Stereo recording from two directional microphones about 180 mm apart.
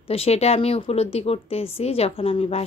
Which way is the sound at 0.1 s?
35° left (ahead or behind).